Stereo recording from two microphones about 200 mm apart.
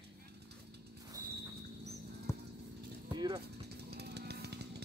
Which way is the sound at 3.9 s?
55° right (ahead or behind).